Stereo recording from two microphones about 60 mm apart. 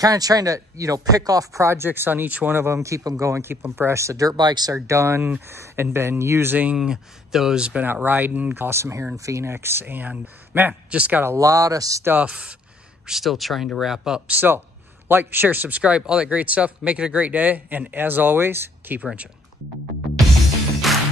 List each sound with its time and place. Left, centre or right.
0.0 s speech: right
1.9 s speech: right
2.7 s speech: right
3.4 s speech: right
4.7 s speech: right
6.8 s speech: centre
7.8 s speech: right
8.5 s speech: right
10.7 s speech: right
11.3 s speech: right
12.2 s speech: centre
13.0 s speech: centre
14.3 s speech: right
20.9 s music: centre